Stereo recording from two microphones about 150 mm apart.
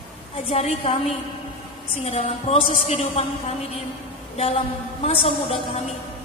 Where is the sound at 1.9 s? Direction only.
40° left (ahead or behind).